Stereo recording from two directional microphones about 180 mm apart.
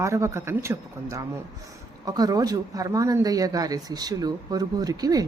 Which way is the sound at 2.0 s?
20° right (ahead or behind).